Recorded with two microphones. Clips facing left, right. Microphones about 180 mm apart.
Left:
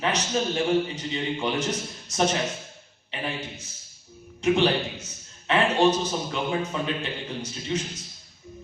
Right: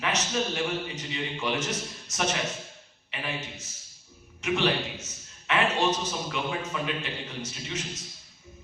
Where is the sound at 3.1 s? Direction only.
35° left (ahead or behind).